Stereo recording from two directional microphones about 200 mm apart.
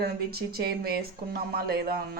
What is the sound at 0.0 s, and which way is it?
Speech, 50° right (ahead or behind).